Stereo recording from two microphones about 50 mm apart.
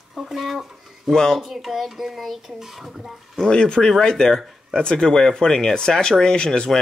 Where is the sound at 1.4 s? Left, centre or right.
Centre.